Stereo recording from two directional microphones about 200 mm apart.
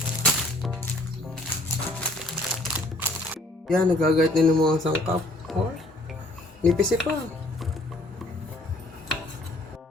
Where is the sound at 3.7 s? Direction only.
Centre (ahead or behind).